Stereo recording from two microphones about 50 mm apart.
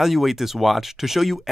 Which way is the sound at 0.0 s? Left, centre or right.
Centre.